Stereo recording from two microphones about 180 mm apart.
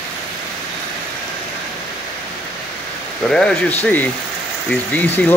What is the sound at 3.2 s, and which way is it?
Speech, 5° left (ahead or behind).